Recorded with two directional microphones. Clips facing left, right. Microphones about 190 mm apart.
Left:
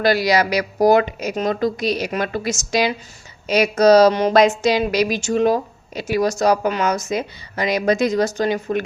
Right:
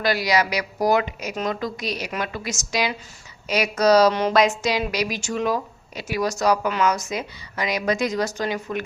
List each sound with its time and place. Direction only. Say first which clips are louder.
0.0 s a woman's voice: left 5 dB; 30° left (ahead or behind)